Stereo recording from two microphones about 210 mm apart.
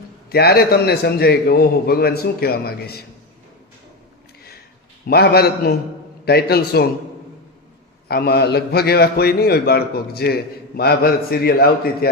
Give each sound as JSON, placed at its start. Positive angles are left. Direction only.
{"t": 0.3, "sound": "a man's voice", "side_deg": 50}
{"t": 5.0, "sound": "a man's voice", "side_deg": 50}
{"t": 8.0, "sound": "a man's voice", "side_deg": 50}